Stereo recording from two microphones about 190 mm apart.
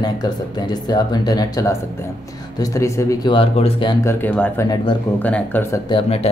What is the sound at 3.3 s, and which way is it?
Speech, 30° left (ahead or behind).